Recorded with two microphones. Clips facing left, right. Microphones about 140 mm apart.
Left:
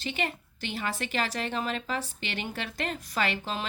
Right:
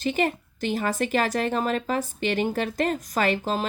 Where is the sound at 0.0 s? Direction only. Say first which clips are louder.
Right 8 dB; 45° right (ahead or behind).